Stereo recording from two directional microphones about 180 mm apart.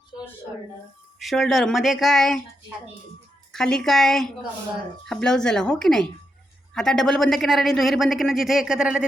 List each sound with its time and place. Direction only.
1.2 s speech: centre (ahead or behind)
3.5 s speech: 5° left (ahead or behind)